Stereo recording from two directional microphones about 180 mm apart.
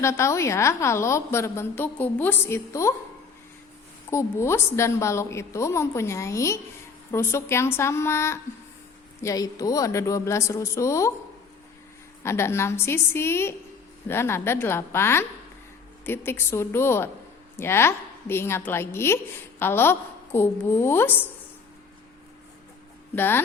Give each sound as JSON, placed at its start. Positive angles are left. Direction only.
{"t": 0.0, "sound": "a woman's voice", "side_deg": 15}
{"t": 4.1, "sound": "a woman's voice", "side_deg": 15}
{"t": 12.2, "sound": "a woman's voice", "side_deg": 15}
{"t": 23.1, "sound": "a woman's voice", "side_deg": 10}